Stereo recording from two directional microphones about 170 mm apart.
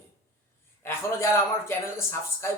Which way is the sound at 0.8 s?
15° left (ahead or behind).